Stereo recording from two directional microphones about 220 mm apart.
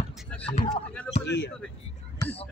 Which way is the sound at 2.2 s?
15° left (ahead or behind).